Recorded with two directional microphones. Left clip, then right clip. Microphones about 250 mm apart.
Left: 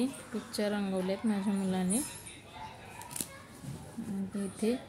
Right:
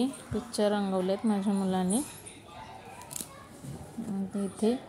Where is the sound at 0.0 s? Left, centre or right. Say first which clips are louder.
Right 3 dB; centre.